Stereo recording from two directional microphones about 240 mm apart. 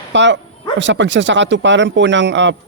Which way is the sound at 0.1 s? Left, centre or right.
Right.